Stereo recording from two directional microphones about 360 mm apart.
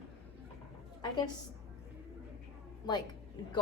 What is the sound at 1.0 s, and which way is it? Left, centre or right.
Speech, centre.